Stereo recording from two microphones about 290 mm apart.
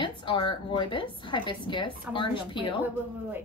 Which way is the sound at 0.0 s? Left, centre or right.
Centre.